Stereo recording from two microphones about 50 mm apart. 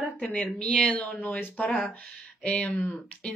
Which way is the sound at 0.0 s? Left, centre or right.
Left.